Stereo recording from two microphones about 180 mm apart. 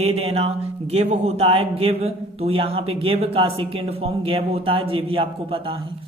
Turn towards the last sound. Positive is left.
turn(degrees=-30)  # may be behind; listen again after turning